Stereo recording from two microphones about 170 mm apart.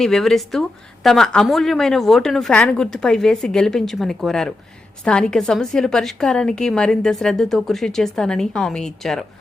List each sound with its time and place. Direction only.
0.0 s a woman's voice: 5° left (ahead or behind)